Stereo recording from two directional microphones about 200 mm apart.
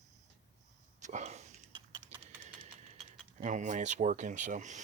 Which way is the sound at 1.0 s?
35° right (ahead or behind).